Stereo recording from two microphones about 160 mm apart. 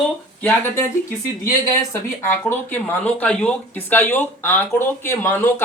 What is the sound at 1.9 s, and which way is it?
Speech, 15° left (ahead or behind).